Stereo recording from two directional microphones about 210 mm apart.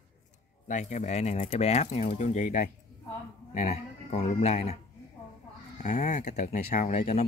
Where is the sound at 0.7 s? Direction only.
35° left (ahead or behind).